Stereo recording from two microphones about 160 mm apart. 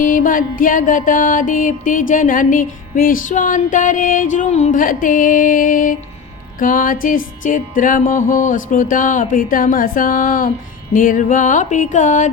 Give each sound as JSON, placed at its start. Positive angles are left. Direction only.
{"t": 0.0, "sound": "music", "side_deg": 55}